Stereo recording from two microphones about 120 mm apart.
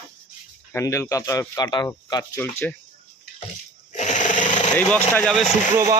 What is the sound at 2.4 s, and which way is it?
Speech, 20° left (ahead or behind).